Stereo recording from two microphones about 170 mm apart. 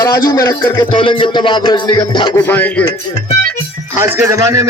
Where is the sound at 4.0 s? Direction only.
15° right (ahead or behind).